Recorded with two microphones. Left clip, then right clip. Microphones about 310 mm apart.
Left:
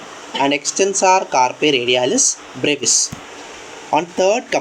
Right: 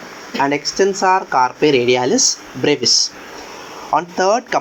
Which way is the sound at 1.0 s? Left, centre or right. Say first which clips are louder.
Left 2 dB; centre.